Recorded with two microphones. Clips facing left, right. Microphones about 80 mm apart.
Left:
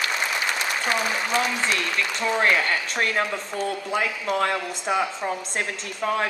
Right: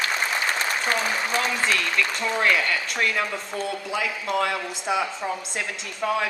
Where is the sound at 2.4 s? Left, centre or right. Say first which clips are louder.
Left 1 dB; left.